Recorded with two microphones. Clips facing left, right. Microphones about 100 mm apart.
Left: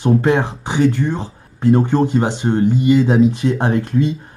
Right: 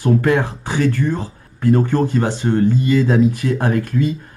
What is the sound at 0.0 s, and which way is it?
Speech, 20° left (ahead or behind).